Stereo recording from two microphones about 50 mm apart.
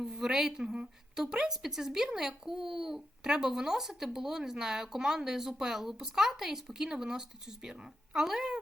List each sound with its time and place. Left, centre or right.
0.0 s a woman's voice: centre